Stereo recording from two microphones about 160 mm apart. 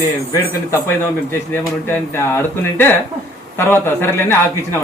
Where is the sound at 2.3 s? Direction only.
15° left (ahead or behind).